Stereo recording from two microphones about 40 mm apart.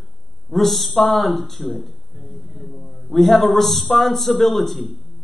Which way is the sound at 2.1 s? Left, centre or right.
Right.